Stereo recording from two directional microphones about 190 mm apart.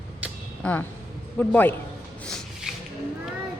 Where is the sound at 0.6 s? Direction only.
10° left (ahead or behind).